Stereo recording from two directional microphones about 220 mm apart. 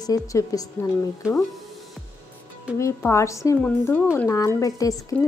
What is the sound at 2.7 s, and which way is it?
Speech, 15° left (ahead or behind).